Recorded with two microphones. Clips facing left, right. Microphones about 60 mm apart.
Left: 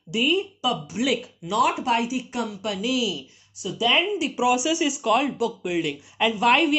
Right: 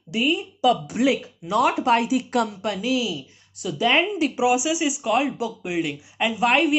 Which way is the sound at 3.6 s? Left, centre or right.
Right.